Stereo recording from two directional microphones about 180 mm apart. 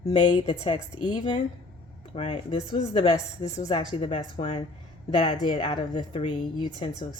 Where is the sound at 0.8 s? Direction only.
25° right (ahead or behind).